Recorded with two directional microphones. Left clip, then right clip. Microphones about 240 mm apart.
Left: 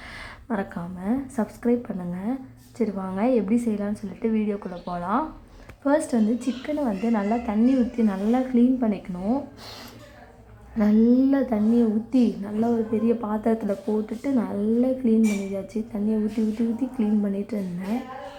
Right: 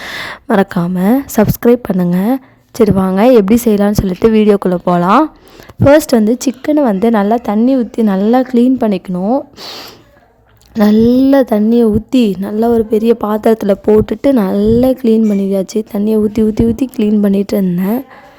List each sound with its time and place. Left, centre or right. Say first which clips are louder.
0.0 s a woman's voice: right 17 dB; right
17.0 s a woman's voice: right 15 dB; right